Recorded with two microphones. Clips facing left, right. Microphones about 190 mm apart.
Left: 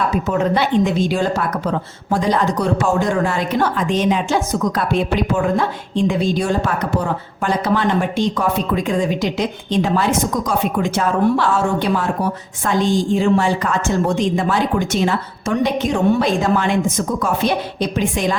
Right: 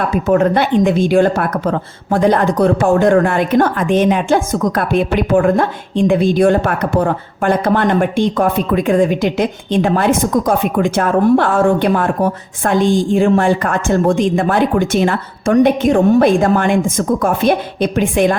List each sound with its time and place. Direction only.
0.3 s a woman's voice: 55° right (ahead or behind)